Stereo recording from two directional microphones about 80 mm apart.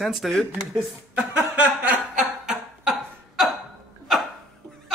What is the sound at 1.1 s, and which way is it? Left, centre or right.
Chuckle, centre.